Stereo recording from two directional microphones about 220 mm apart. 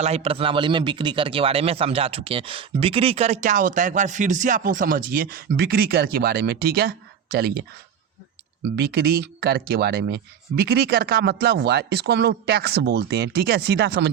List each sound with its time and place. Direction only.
0.0 s speech: 30° right (ahead or behind); by 7.5 s 45° right (ahead or behind)
8.7 s speech: 45° right (ahead or behind)